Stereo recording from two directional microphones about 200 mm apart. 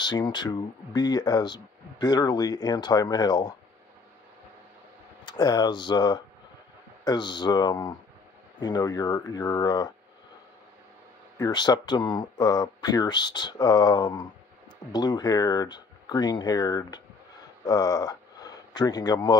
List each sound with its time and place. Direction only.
0.0 s speech: 20° left (ahead or behind)
5.2 s speech: 20° left (ahead or behind)
11.3 s speech: 20° left (ahead or behind)